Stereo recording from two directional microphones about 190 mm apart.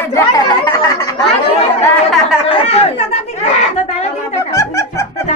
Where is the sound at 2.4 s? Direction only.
30° left (ahead or behind).